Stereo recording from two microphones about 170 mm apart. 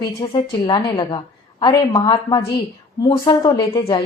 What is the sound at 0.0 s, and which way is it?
Speech, 25° left (ahead or behind).